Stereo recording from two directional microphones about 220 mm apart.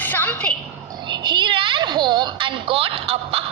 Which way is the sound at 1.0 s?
20° right (ahead or behind).